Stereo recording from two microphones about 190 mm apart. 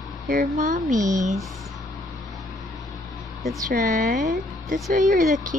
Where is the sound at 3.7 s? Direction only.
40° right (ahead or behind).